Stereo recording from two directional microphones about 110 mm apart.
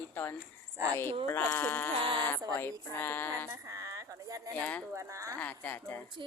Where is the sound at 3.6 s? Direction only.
30° right (ahead or behind).